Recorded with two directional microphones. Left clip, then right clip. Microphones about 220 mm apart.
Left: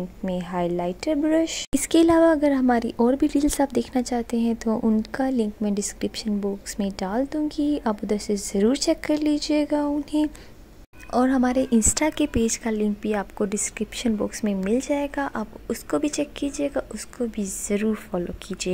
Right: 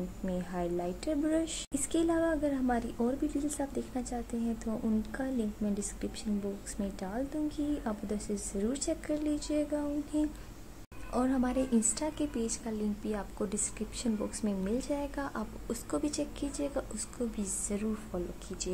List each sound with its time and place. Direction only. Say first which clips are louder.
0.2 s speech: left 10 dB; 35° left (ahead or behind)